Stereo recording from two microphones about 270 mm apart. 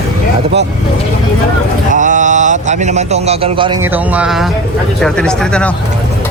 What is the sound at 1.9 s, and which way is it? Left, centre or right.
A man's voice, right.